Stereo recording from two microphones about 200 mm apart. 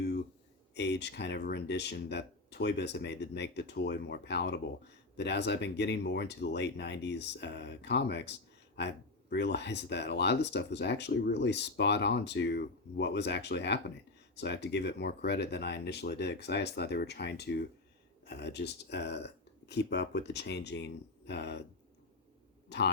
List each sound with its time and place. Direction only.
0.7 s speech: 60° left (ahead or behind)
22.7 s speech: 60° left (ahead or behind)